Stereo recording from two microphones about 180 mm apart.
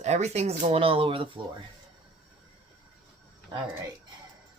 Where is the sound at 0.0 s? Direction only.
40° right (ahead or behind).